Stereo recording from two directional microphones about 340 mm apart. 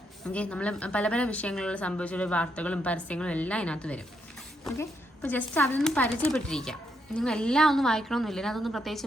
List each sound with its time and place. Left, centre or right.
0.3 s a woman's voice: centre